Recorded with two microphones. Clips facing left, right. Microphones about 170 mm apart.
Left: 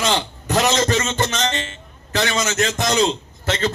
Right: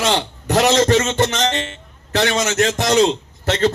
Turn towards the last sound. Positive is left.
turn(degrees=-65)  # may be behind; listen again after turning